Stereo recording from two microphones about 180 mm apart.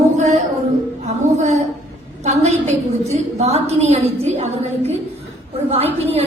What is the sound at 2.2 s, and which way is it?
A woman's voice, 35° right (ahead or behind).